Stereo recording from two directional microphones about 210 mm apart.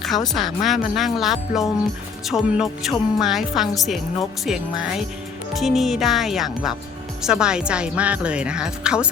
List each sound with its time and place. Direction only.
0.3 s speech: centre (ahead or behind)